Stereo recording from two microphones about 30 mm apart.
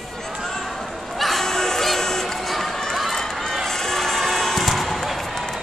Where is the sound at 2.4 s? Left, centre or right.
Centre.